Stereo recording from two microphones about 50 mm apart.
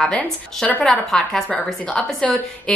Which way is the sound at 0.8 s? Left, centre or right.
Centre.